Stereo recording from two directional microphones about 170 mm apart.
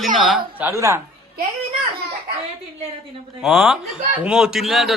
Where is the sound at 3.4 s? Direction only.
Centre (ahead or behind).